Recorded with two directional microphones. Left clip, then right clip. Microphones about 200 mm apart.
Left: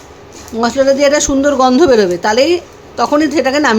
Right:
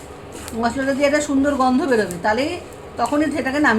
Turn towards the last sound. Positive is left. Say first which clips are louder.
# left 6 dB
turn(degrees=55)  # may be behind; listen again after turning